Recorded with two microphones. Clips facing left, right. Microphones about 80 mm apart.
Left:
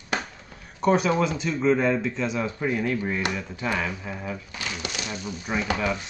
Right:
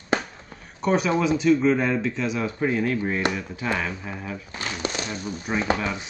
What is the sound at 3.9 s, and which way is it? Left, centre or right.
Speech, right.